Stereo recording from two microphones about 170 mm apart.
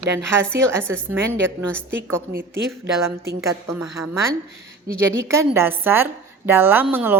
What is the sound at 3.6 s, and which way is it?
A woman's voice, 15° right (ahead or behind).